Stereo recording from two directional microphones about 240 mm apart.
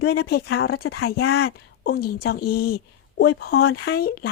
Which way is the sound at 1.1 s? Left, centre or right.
Left.